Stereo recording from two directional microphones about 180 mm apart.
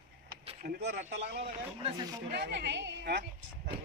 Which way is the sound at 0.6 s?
70° right (ahead or behind).